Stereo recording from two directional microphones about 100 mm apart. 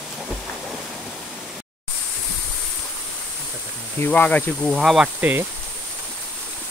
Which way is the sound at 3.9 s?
20° left (ahead or behind).